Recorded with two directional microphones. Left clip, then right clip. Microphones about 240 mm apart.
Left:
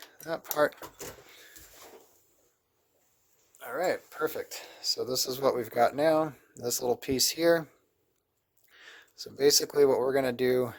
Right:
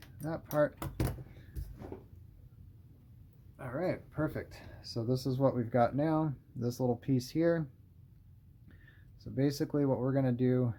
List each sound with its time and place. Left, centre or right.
0.3 s speech: left
3.8 s speech: left
8.8 s speech: left